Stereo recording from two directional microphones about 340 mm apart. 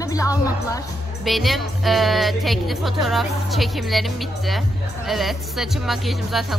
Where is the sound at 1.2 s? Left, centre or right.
Centre.